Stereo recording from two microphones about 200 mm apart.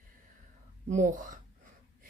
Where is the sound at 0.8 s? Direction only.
35° right (ahead or behind).